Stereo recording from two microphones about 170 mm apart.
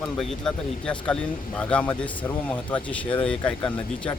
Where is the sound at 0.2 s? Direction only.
5° left (ahead or behind).